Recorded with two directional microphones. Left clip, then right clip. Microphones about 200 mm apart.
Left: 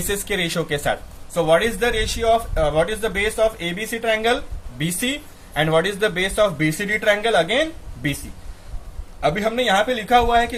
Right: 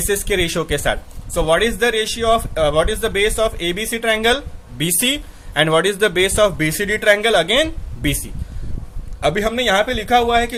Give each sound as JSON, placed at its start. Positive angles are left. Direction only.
{"t": 0.1, "sound": "a man's voice", "side_deg": -35}
{"t": 9.2, "sound": "a man's voice", "side_deg": -40}